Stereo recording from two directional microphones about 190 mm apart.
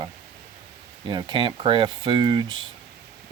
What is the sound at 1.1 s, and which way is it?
Speech, 25° right (ahead or behind).